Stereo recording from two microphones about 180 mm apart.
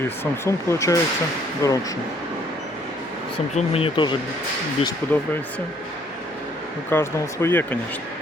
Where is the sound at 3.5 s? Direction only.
30° left (ahead or behind).